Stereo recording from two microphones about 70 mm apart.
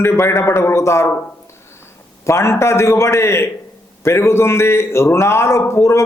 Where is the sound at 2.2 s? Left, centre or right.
Left.